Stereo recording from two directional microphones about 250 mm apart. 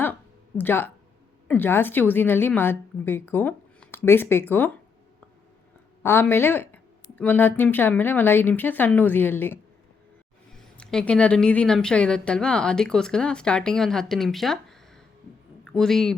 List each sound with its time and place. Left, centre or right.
0.0 s a sound: centre
1.5 s a woman's voice: centre
6.0 s a woman's voice: centre